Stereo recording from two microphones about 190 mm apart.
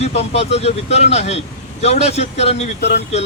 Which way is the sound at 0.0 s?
35° left (ahead or behind).